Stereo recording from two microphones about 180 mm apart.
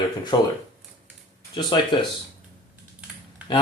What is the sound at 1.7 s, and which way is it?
Speech, 25° left (ahead or behind).